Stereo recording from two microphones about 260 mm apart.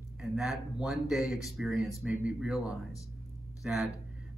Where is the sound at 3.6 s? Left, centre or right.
Centre.